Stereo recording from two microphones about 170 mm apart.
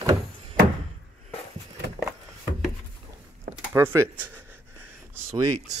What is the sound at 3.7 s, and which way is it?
Speech, 15° right (ahead or behind).